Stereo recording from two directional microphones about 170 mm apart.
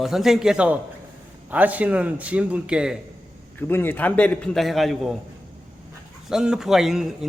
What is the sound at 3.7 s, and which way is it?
A man's voice, 10° left (ahead or behind).